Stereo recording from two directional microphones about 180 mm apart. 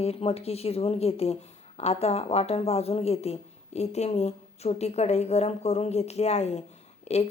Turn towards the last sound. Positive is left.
turn(degrees=35)  # may be behind; listen again after turning